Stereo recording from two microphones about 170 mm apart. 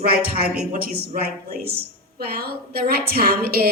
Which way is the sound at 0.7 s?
65° right (ahead or behind).